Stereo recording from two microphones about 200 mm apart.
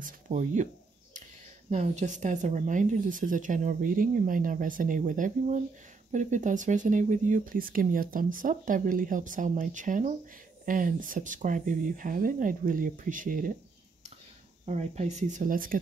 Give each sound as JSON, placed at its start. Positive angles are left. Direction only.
{"t": 0.0, "sound": "a sound", "side_deg": -40}
{"t": 1.7, "sound": "speech", "side_deg": -35}
{"t": 14.7, "sound": "speech", "side_deg": -35}